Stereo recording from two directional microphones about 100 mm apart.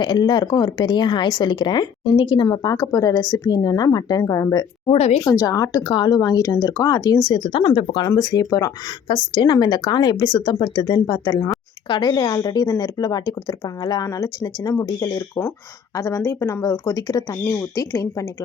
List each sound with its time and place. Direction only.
0.0 s a woman's voice: 50° left (ahead or behind); by 4.6 s 35° left (ahead or behind)
4.9 s speech: 90° left
5.2 s speech: 35° left (ahead or behind)
7.3 s a woman's voice: 55° left (ahead or behind)
8.0 s speech: 40° left (ahead or behind)
9.0 s a woman's voice: 50° left (ahead or behind)
11.9 s speech: 50° left (ahead or behind)
16.0 s speech: 30° left (ahead or behind)
17.4 s speech: 30° left (ahead or behind)